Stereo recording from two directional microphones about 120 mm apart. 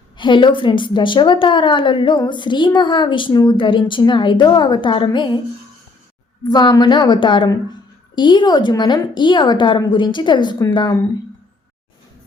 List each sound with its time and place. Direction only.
0.2 s a woman's voice: 40° left (ahead or behind)
6.4 s a woman's voice: 40° left (ahead or behind)